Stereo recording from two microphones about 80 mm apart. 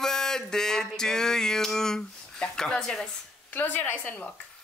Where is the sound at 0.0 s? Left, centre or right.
Centre.